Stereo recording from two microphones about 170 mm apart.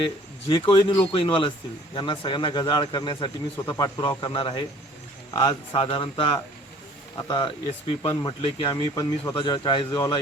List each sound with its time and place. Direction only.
0.0 s a man's voice: 30° left (ahead or behind)